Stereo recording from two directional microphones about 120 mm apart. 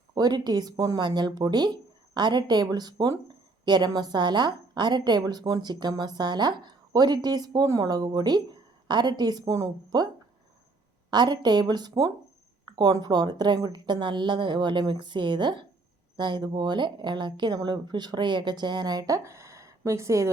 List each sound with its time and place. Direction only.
0.1 s a woman's voice: 35° right (ahead or behind)
11.1 s a woman's voice: 35° right (ahead or behind)